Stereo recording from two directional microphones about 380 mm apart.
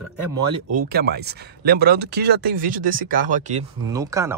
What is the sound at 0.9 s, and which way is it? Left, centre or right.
Speech, right.